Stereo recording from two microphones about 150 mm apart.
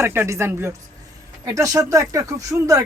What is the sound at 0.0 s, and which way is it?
Speech, 15° right (ahead or behind).